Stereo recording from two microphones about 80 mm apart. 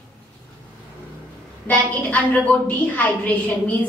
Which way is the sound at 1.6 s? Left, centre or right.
Centre.